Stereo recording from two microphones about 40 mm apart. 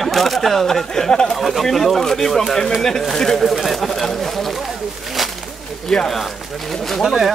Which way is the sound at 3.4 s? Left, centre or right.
Centre.